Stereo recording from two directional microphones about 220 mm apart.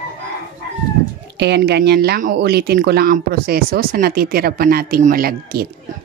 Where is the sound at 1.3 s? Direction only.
50° right (ahead or behind).